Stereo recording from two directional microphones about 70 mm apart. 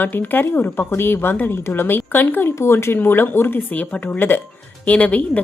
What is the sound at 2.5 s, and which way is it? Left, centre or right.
Speech, left.